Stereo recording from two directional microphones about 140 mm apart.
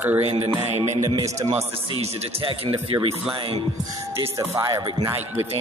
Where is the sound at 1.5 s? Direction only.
45° right (ahead or behind).